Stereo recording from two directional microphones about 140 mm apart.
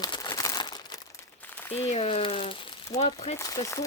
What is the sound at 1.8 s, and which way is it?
Speech, 45° left (ahead or behind).